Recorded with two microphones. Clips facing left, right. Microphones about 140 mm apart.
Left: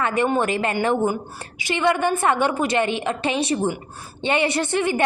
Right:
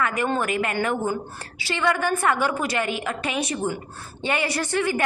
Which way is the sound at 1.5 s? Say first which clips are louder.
Left 3 dB; 20° left (ahead or behind).